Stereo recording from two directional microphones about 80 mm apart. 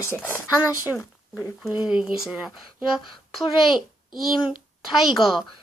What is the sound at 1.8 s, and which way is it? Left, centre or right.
Speech, centre.